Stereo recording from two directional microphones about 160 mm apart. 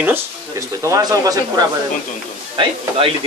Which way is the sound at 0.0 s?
15° right (ahead or behind).